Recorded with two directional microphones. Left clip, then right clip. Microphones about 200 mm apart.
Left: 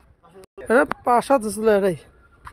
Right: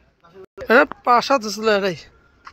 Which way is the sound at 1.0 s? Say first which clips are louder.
Right 2 dB; 25° left (ahead or behind).